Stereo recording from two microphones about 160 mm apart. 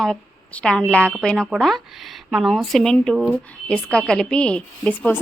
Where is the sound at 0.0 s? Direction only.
5° left (ahead or behind).